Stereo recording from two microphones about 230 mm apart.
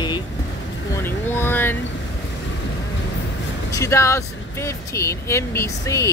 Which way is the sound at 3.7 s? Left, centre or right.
Centre.